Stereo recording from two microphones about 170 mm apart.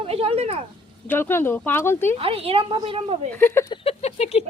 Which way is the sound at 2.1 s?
35° right (ahead or behind).